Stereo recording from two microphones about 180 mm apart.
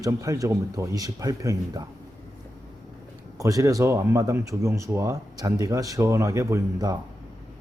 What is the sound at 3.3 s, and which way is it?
Speech, 15° right (ahead or behind).